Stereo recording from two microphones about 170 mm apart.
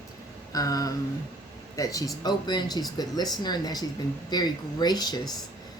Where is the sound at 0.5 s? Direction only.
20° left (ahead or behind).